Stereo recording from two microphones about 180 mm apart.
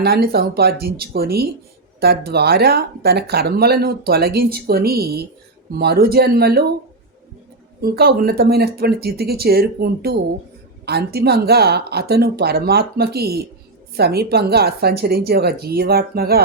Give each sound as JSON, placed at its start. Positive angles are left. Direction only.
{"t": 0.0, "sound": "speech", "side_deg": -60}
{"t": 7.8, "sound": "speech", "side_deg": -60}